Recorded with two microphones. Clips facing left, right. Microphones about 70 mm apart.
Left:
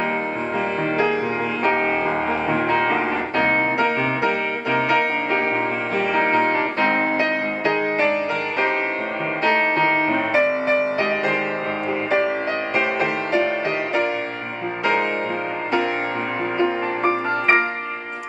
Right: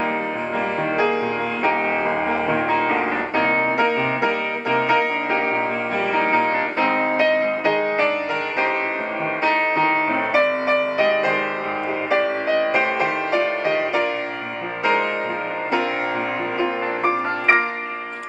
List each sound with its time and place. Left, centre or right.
9.4 s music: centre
12.7 s music: centre